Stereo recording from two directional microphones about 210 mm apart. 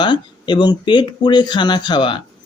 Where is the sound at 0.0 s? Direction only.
20° left (ahead or behind).